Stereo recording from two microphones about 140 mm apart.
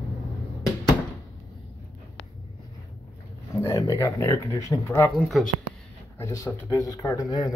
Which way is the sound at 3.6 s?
20° left (ahead or behind).